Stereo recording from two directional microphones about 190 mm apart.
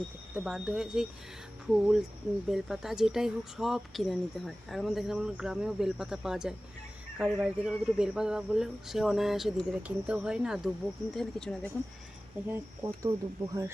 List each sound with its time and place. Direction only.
0.3 s speech: 5° right (ahead or behind)
12.5 s speech: 15° right (ahead or behind)